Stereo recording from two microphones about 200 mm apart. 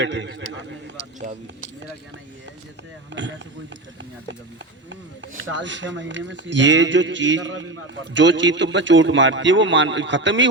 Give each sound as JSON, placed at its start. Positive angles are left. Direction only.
{"t": 0.0, "sound": "a man's voice", "side_deg": -65}
{"t": 3.1, "sound": "a man's voice", "side_deg": -65}
{"t": 5.4, "sound": "a man's voice", "side_deg": -65}